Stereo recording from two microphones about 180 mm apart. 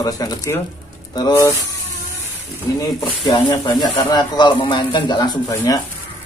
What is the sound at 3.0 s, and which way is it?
Speech, 25° left (ahead or behind).